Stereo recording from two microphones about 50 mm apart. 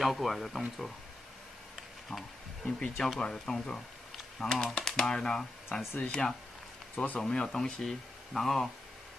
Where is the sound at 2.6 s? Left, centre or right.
Centre.